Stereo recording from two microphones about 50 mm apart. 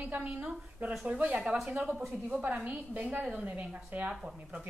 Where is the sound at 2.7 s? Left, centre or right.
Right.